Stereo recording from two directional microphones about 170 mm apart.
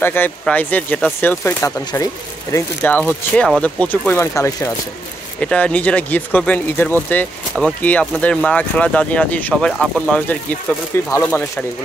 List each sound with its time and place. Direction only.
0.0 s speech: 10° left (ahead or behind)
5.4 s speech: 5° left (ahead or behind)